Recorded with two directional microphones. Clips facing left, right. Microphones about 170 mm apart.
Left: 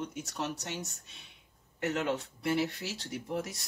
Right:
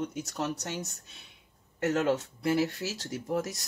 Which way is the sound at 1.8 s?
40° right (ahead or behind).